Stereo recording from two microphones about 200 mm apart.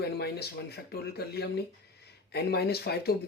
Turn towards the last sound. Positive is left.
turn(degrees=55)  # may be behind; listen again after turning